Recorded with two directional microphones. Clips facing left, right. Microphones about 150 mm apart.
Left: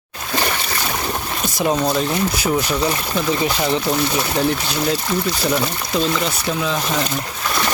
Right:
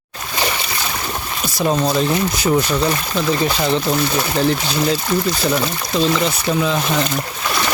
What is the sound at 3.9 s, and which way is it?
Speech, centre (ahead or behind).